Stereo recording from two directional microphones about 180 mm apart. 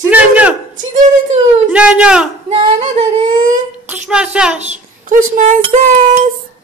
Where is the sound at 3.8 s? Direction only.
5° right (ahead or behind).